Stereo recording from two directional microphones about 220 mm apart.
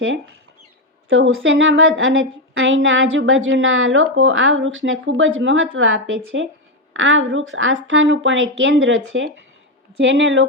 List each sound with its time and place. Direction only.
1.1 s a woman's voice: 65° right (ahead or behind)